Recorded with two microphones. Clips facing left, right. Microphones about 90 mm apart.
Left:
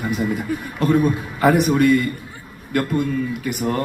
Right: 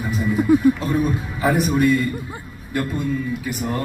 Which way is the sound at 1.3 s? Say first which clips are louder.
Left 3 dB; 60° left (ahead or behind).